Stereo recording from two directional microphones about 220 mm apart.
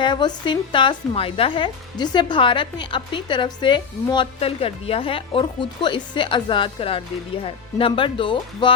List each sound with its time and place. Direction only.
0.0 s a woman's voice: 20° left (ahead or behind)